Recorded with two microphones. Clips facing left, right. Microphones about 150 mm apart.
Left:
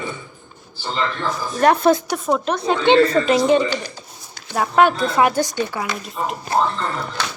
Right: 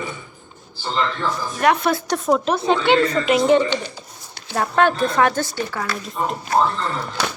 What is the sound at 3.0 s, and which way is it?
Speech, 30° left (ahead or behind).